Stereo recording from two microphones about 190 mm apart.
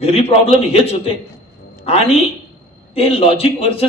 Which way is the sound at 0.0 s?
30° left (ahead or behind).